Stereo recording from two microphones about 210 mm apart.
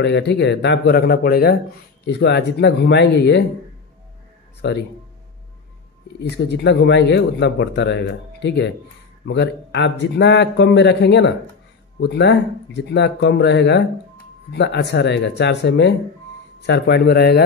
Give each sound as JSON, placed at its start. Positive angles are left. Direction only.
{"t": 0.0, "sound": "speech", "side_deg": 55}
{"t": 4.6, "sound": "speech", "side_deg": 50}
{"t": 6.2, "sound": "speech", "side_deg": 55}